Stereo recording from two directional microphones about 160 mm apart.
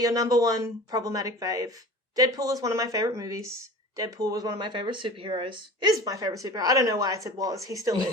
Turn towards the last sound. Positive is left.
turn(degrees=-20)  # may be behind; listen again after turning